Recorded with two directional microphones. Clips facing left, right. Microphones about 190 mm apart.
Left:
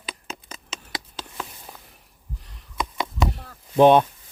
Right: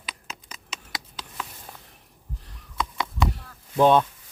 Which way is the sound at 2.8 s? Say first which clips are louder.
Left 1 dB; 20° left (ahead or behind).